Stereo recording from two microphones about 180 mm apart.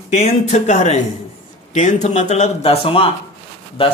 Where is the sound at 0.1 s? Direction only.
40° left (ahead or behind).